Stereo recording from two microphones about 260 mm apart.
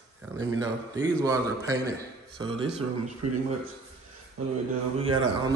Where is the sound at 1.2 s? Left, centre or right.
Centre.